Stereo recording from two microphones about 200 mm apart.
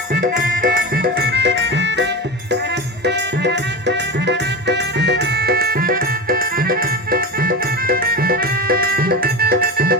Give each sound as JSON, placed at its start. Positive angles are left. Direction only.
{"t": 0.1, "sound": "music", "side_deg": -45}